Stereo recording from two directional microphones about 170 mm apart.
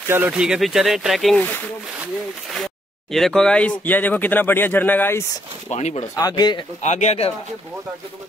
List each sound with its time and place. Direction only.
0.1 s speech: 10° right (ahead or behind); by 5.2 s 10° left (ahead or behind)
5.7 s speech: 40° left (ahead or behind)
6.1 s speech: 25° left (ahead or behind)
6.8 s speech: 45° left (ahead or behind)